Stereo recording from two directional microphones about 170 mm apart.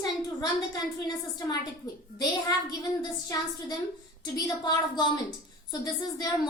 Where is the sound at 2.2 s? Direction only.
25° left (ahead or behind).